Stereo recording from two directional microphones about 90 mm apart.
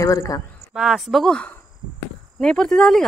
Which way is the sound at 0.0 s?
40° left (ahead or behind).